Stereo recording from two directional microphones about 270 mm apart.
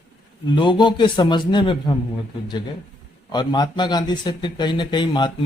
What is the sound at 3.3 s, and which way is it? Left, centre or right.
A man's voice, centre.